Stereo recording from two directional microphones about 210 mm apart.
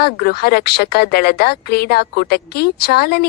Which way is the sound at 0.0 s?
45° left (ahead or behind).